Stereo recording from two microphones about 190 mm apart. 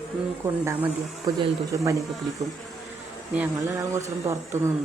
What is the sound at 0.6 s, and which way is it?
Speech, 15° right (ahead or behind).